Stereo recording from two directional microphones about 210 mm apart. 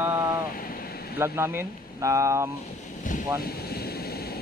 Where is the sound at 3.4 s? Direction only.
45° left (ahead or behind).